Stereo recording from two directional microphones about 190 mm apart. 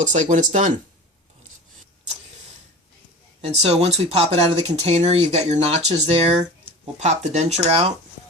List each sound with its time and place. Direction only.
0.1 s speech: 40° right (ahead or behind)
3.4 s speech: 35° right (ahead or behind)